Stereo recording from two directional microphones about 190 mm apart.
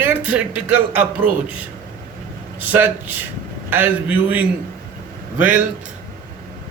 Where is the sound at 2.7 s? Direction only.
10° right (ahead or behind).